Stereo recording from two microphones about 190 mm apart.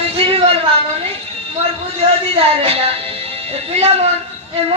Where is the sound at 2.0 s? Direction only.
30° right (ahead or behind).